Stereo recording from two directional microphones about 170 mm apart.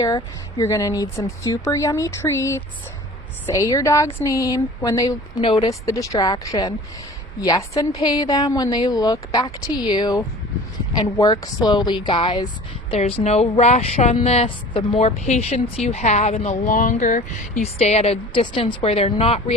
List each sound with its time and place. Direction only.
0.6 s a woman's voice: 20° left (ahead or behind); by 19.5 s 35° left (ahead or behind)